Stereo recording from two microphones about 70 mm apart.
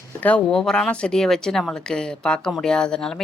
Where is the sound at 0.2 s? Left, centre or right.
Left.